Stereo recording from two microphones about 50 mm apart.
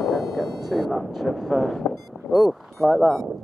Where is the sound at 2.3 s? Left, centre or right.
Centre.